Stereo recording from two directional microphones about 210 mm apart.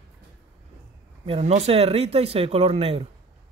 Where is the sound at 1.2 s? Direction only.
30° right (ahead or behind).